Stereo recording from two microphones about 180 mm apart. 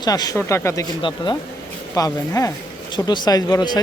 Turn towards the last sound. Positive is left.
turn(degrees=20)  # may be behind; listen again after turning